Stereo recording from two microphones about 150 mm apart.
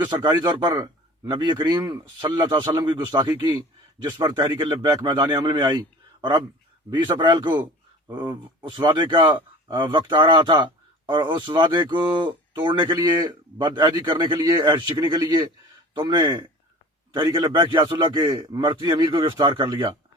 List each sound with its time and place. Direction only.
0.0 s a man's voice: 30° right (ahead or behind)
6.9 s speech: 30° right (ahead or behind)